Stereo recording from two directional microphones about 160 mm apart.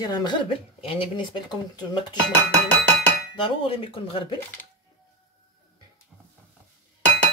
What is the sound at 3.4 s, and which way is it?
Speech, 35° left (ahead or behind).